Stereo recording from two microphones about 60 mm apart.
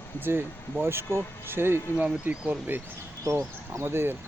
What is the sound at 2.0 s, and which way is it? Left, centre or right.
Speech, centre.